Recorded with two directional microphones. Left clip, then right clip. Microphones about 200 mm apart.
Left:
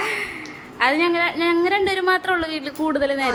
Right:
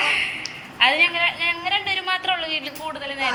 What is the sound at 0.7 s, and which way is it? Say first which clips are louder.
Speech: right 1 dB; 25° left (ahead or behind).